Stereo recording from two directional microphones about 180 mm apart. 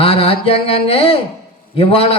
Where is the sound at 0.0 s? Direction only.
30° left (ahead or behind).